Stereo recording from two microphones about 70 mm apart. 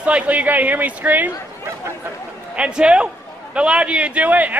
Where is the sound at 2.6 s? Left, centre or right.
Centre.